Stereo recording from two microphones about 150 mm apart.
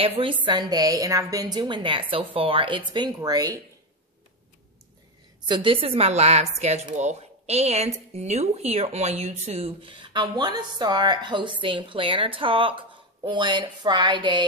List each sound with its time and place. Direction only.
0.0 s a woman's voice: 40° right (ahead or behind)
0.5 s a woman's voice: 25° right (ahead or behind)
5.5 s a woman's voice: 35° right (ahead or behind)